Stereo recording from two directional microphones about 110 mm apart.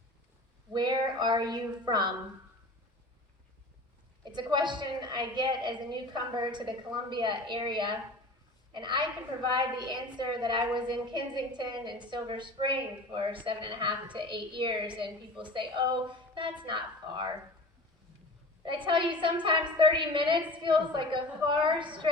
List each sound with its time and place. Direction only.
0.7 s a woman's voice: 40° right (ahead or behind)
4.3 s a woman's voice: 40° right (ahead or behind)
18.6 s a woman's voice: 50° right (ahead or behind)